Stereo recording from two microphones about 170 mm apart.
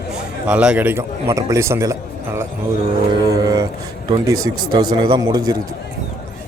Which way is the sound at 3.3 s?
20° right (ahead or behind).